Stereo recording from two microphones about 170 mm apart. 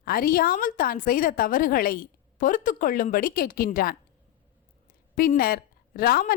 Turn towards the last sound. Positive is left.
turn(degrees=60)  # may be behind; listen again after turning